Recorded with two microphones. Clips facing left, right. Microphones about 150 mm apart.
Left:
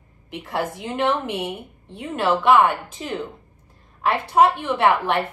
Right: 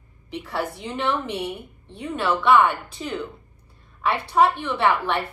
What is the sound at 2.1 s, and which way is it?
A woman's voice, 45° left (ahead or behind).